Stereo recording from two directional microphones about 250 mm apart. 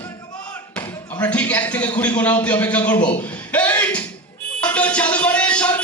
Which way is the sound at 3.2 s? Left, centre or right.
Centre.